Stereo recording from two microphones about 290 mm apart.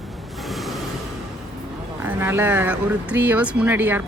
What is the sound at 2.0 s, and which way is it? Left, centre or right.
Speech, centre.